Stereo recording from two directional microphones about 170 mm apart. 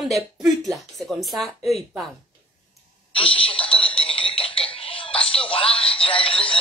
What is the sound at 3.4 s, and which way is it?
Music, 30° left (ahead or behind).